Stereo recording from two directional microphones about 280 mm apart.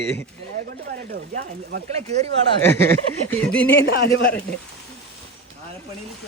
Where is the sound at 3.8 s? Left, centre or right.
Left.